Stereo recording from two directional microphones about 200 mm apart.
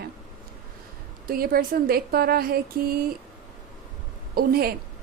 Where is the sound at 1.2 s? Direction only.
45° right (ahead or behind).